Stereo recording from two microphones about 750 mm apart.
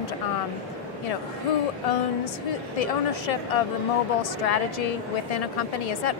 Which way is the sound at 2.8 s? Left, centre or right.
Left.